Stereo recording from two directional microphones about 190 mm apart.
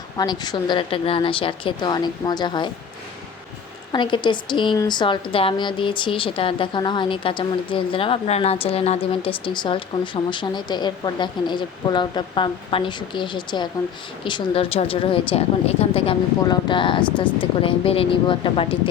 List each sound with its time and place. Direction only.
0.2 s speech: 20° left (ahead or behind)
3.9 s speech: 25° left (ahead or behind)